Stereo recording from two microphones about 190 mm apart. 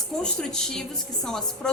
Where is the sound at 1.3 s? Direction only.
5° left (ahead or behind).